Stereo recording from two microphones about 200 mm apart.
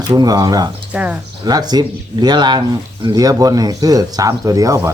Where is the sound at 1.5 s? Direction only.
20° right (ahead or behind).